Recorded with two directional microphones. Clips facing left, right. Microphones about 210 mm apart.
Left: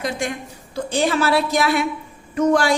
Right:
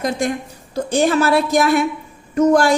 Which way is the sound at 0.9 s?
45° right (ahead or behind).